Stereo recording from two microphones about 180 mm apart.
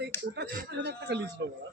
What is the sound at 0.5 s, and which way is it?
Speech, 65° right (ahead or behind).